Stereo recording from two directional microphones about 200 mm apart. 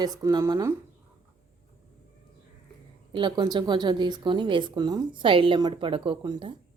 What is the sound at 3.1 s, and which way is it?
Speech, 25° right (ahead or behind).